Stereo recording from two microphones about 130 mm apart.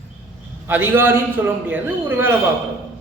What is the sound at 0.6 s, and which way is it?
Speech, 15° right (ahead or behind).